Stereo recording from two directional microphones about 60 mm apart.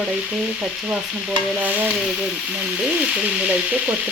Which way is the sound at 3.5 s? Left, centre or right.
Right.